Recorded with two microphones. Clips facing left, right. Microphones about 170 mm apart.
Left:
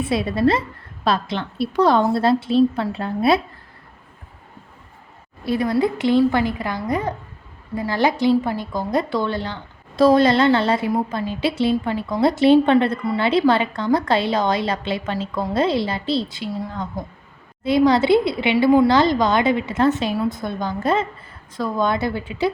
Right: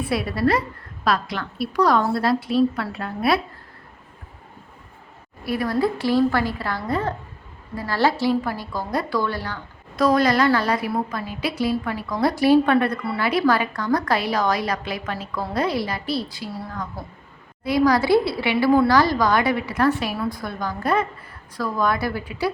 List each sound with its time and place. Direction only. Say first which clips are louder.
0.0 s a woman's voice: left 3 dB; 25° left (ahead or behind)
5.5 s a woman's voice: left 3 dB; 20° left (ahead or behind)